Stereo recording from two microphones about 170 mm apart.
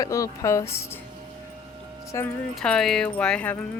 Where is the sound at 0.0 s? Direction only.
20° left (ahead or behind).